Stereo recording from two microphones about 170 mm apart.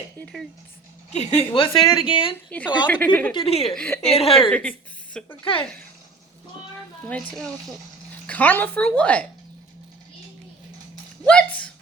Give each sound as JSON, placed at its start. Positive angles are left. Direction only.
{"t": 0.2, "sound": "a woman's voice", "side_deg": 5}
{"t": 1.1, "sound": "a woman's voice", "side_deg": 40}
{"t": 2.5, "sound": "a woman's voice", "side_deg": 10}
{"t": 3.3, "sound": "a woman's voice", "side_deg": 35}
{"t": 3.8, "sound": "a woman's voice", "side_deg": 10}
{"t": 4.0, "sound": "a woman's voice", "side_deg": 35}
{"t": 4.4, "sound": "a woman's voice", "side_deg": 5}
{"t": 7.1, "sound": "a woman's voice", "side_deg": 5}
{"t": 11.3, "sound": "a woman's voice", "side_deg": 5}